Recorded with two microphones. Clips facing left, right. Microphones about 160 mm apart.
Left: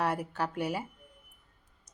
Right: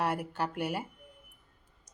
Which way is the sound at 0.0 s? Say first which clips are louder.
Left 1 dB; centre (ahead or behind).